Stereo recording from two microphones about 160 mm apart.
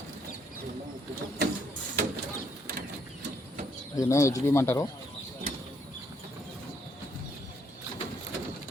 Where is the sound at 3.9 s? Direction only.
20° left (ahead or behind).